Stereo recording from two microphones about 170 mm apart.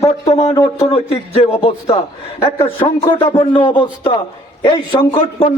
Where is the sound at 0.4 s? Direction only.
15° left (ahead or behind).